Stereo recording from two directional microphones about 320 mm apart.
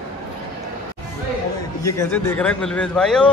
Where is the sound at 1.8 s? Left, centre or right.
Centre.